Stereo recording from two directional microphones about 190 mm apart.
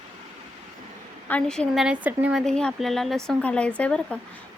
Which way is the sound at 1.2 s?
5° left (ahead or behind).